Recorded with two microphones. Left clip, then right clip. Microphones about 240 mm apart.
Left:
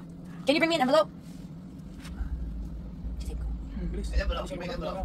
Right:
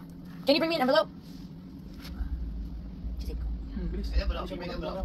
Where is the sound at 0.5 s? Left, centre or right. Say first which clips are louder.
Left 1 dB; centre.